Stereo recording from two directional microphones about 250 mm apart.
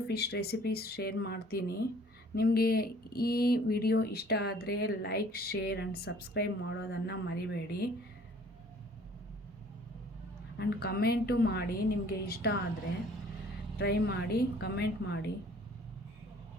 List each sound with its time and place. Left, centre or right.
0.1 s speech: left
10.6 s speech: left
13.7 s speech: left